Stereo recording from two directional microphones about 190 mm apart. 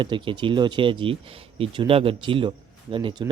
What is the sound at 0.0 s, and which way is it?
Speech, 25° right (ahead or behind).